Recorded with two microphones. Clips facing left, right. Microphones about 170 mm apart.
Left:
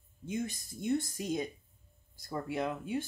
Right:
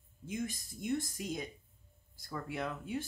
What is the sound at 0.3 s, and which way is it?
Speech, 25° left (ahead or behind).